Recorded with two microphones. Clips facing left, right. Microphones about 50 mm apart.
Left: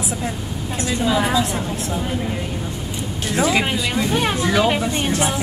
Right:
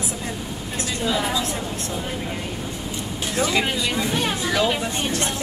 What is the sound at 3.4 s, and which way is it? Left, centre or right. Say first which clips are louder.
Speech: left 3 dB; centre.